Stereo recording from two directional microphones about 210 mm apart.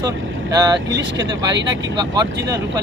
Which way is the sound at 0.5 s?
15° right (ahead or behind).